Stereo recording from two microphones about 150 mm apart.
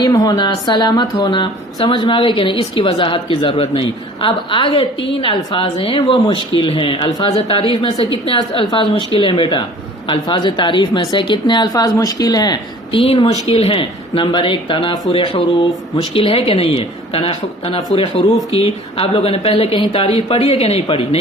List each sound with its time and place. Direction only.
0.0 s a woman's voice: 25° left (ahead or behind)
7.3 s a woman's voice: 40° left (ahead or behind)